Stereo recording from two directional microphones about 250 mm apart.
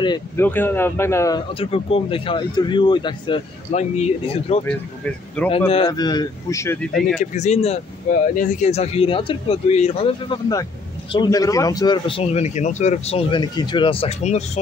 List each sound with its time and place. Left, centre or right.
0.0 s speech: centre
5.4 s speech: centre
5.7 s speech: left
7.2 s speech: left